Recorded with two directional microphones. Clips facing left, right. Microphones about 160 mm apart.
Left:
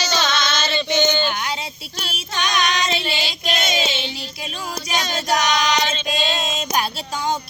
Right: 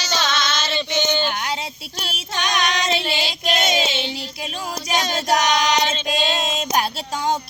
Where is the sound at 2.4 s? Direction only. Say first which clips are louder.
Left 1 dB; 65° right (ahead or behind).